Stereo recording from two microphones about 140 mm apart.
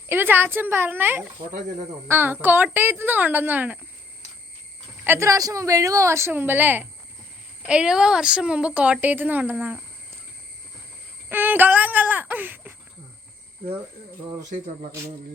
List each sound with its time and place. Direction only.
0.1 s a woman's voice: 15° right (ahead or behind)
5.0 s a woman's voice: 20° right (ahead or behind)
11.3 s a woman's voice: 15° right (ahead or behind)